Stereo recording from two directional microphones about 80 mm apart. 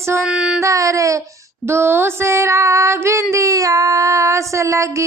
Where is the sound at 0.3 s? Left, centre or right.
Centre.